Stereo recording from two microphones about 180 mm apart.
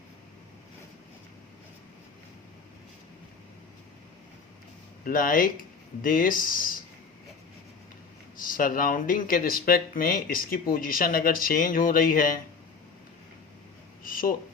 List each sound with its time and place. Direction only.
5.0 s speech: 50° left (ahead or behind)
8.4 s speech: 50° left (ahead or behind)
14.0 s a sound: 50° left (ahead or behind)